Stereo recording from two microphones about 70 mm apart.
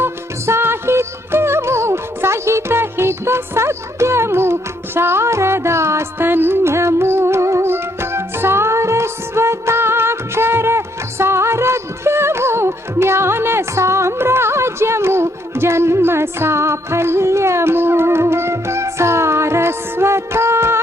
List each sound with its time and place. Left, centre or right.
0.0 s music: right